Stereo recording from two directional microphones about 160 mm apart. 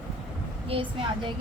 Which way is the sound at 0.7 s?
35° right (ahead or behind).